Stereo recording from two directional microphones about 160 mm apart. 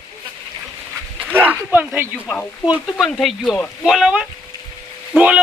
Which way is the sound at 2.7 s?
Centre (ahead or behind).